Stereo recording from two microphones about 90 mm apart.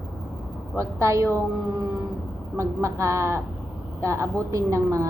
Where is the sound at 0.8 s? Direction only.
35° right (ahead or behind).